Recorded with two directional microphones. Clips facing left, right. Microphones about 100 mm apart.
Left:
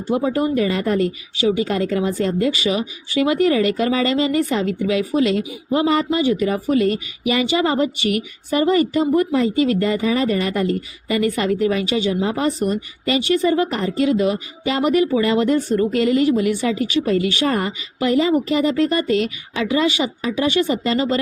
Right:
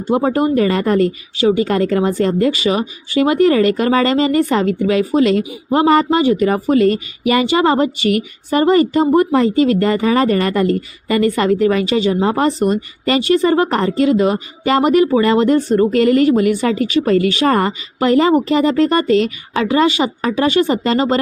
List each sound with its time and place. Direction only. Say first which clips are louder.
0.1 s speech: right 4 dB; 50° right (ahead or behind)
1.0 s a woman's voice: right 5 dB; 40° right (ahead or behind)
1.6 s speech: right 5 dB; 50° right (ahead or behind)
9.8 s speech: right 5 dB; 55° right (ahead or behind); by 21.2 s 40° right (ahead or behind)